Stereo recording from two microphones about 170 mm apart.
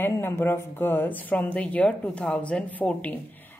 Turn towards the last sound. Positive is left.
turn(degrees=10)  # may be behind; listen again after turning